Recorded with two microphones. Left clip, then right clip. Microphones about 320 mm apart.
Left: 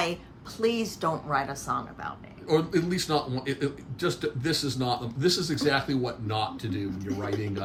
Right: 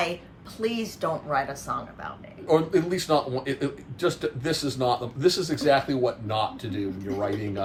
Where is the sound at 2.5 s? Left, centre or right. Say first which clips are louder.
Right 3 dB; centre.